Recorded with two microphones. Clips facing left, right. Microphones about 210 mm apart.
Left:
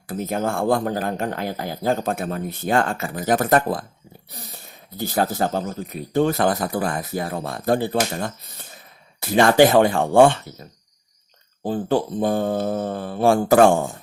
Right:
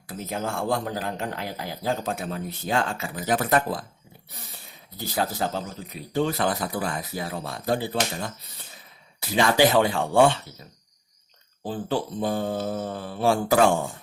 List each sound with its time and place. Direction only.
0.1 s speech: 50° left (ahead or behind)
11.6 s speech: 45° left (ahead or behind)